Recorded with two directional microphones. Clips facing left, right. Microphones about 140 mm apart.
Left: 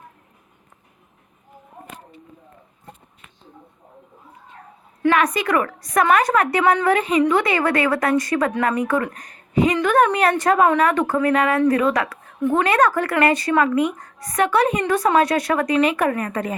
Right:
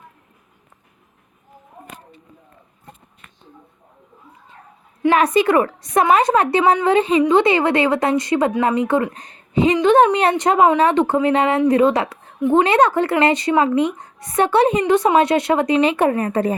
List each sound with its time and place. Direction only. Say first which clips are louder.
5.1 s a woman's voice: right 6 dB; 30° right (ahead or behind)